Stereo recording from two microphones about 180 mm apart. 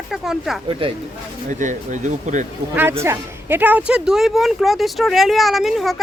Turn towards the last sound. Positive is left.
turn(degrees=0)  # may be behind; listen again after turning